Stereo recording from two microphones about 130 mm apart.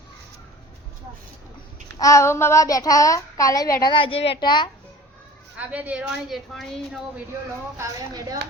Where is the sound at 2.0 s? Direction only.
25° left (ahead or behind).